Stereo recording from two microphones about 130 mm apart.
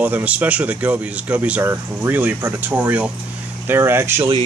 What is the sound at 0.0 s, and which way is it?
Speech, 10° right (ahead or behind).